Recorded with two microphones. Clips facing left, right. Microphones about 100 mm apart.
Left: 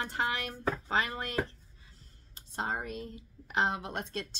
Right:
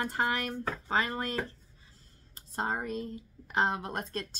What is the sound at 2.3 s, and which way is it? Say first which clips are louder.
Speech: right 2 dB; 40° right (ahead or behind).